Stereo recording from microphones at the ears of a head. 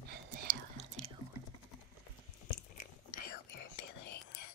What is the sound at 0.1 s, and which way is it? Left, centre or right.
Whispering, right.